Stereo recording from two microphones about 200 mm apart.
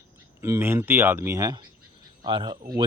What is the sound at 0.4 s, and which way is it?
Speech, 10° right (ahead or behind).